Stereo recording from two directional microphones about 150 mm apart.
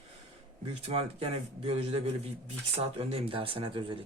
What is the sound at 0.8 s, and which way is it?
Speech, 40° right (ahead or behind).